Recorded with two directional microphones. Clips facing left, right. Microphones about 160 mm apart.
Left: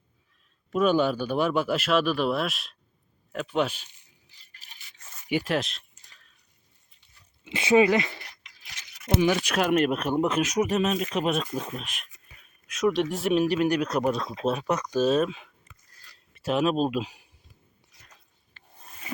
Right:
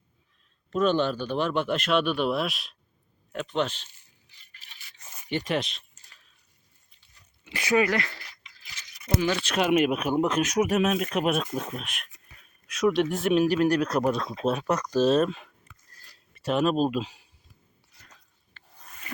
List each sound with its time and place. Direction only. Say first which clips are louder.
0.7 s speech: left 1 dB; 10° left (ahead or behind)
5.3 s speech: left 2 dB; 5° left (ahead or behind)
7.4 s speech: left 4 dB; 25° left (ahead or behind)
9.6 s speech: right 3 dB; 5° right (ahead or behind)
17.0 s speech: even; 15° left (ahead or behind)